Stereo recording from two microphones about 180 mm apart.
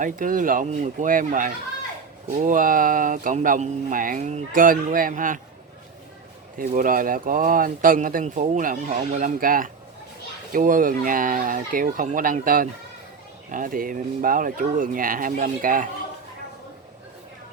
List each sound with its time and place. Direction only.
0.0 s speech: 45° right (ahead or behind)
6.6 s speech: 45° right (ahead or behind)